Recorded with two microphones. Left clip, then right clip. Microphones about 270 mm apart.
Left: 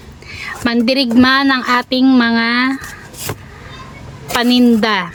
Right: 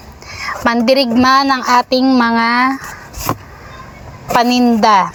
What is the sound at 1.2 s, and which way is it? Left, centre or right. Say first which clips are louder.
Speech: right 1 dB; centre.